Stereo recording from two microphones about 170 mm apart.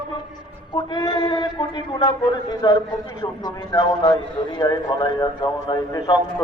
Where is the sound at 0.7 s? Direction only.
25° left (ahead or behind).